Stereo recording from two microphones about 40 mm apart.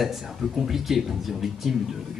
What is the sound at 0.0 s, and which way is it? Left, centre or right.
Speech, centre.